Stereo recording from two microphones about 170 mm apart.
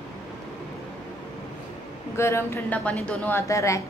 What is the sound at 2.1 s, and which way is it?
Speech, 15° left (ahead or behind).